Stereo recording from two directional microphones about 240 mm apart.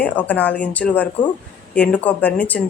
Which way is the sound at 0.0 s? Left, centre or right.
Centre.